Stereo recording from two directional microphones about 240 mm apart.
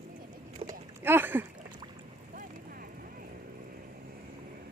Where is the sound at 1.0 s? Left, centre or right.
Centre.